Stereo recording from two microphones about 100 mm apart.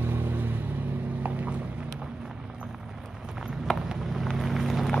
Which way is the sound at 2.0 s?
10° right (ahead or behind).